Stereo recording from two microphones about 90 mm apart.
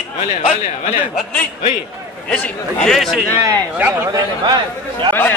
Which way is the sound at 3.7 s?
20° right (ahead or behind).